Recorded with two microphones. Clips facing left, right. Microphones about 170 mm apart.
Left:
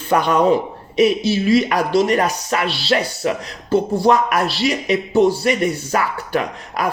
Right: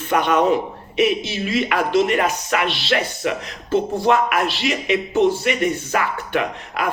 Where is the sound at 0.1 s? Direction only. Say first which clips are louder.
Left 2 dB; 35° left (ahead or behind).